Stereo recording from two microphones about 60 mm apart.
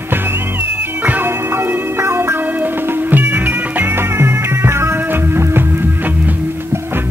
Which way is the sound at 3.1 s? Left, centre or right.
Right.